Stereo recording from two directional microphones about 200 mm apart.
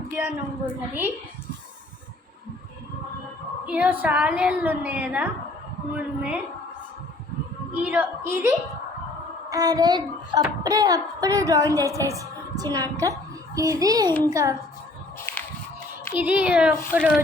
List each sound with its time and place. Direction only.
0.2 s a child's voice: 10° right (ahead or behind)
3.7 s a child's voice: 5° right (ahead or behind)
7.8 s a child's voice: 10° right (ahead or behind)
15.3 s a sound: 10° left (ahead or behind)
16.1 s a child's voice: 10° right (ahead or behind)